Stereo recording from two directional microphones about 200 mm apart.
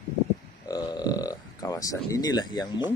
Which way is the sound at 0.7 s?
20° left (ahead or behind).